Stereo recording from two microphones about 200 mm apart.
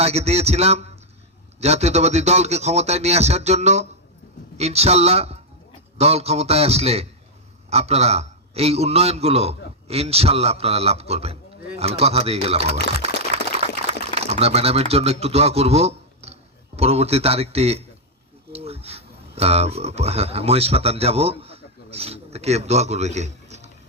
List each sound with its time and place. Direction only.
0.0 s a man's voice: 30° right (ahead or behind)
13.3 s a sound: 30° right (ahead or behind)
14.2 s speech: 30° right (ahead or behind)